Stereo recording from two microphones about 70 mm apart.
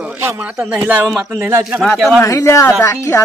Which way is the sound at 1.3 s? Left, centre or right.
Right.